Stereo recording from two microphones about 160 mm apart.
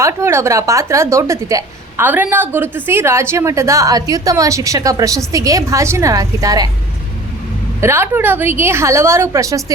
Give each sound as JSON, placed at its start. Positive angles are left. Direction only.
{"t": 0.0, "sound": "a woman's voice", "side_deg": -15}
{"t": 7.8, "sound": "a woman's voice", "side_deg": -15}